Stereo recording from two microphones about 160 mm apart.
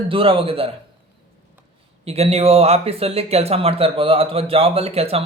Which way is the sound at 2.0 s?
40° right (ahead or behind).